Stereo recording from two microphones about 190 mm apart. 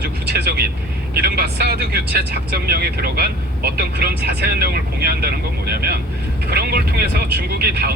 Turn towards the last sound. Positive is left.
turn(degrees=-55)  # may be behind; listen again after turning